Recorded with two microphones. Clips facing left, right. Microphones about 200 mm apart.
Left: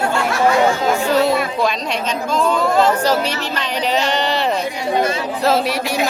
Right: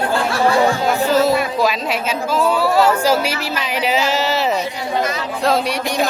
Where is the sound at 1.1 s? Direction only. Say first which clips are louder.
Right 1 dB; centre (ahead or behind).